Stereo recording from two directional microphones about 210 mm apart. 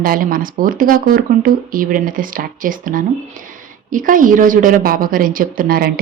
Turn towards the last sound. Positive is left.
turn(degrees=-45)  # may be behind; listen again after turning